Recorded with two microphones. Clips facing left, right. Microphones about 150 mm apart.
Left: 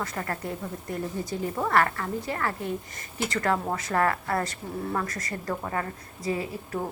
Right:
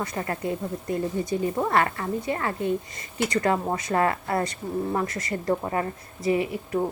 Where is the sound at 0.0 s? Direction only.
20° right (ahead or behind).